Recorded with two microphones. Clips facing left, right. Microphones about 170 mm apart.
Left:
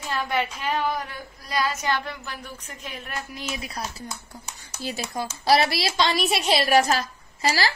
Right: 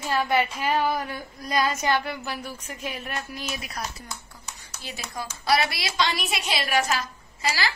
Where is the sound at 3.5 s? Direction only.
25° left (ahead or behind).